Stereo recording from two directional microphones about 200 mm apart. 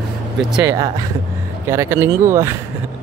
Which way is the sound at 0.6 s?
15° right (ahead or behind).